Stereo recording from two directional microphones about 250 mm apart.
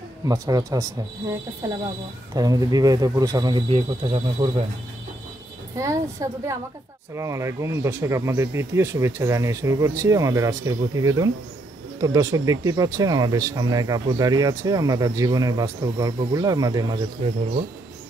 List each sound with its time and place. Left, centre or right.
0.2 s speech: centre
2.3 s speech: centre
5.8 s speech: centre